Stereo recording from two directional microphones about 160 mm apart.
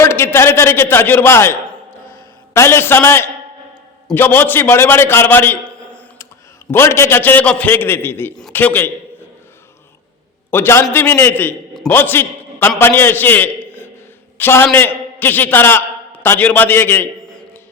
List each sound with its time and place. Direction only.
0.0 s a man's voice: 15° left (ahead or behind)
10.5 s a man's voice: 15° left (ahead or behind)